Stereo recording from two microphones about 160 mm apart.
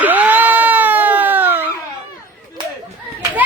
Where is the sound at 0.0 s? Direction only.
10° right (ahead or behind).